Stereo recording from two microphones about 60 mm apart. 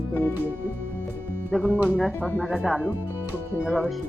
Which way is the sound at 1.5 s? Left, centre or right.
Centre.